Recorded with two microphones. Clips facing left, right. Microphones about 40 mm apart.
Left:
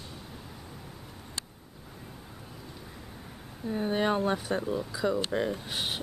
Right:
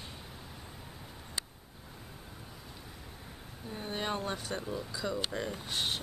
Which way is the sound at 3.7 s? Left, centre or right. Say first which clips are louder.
Left 8 dB; centre.